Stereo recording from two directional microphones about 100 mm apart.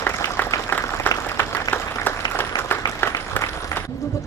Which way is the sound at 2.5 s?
40° left (ahead or behind).